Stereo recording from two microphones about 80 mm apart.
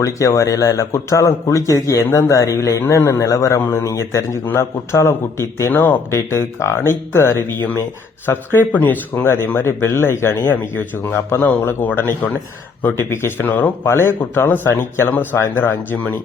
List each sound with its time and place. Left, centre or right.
0.0 s speech: left
3.6 s speech: left
5.7 s speech: left
6.1 s speech: left